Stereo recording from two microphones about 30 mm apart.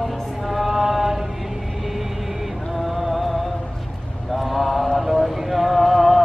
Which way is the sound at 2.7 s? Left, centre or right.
Centre.